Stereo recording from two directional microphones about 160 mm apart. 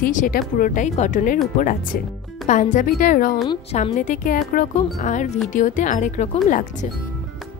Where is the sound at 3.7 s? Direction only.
45° left (ahead or behind).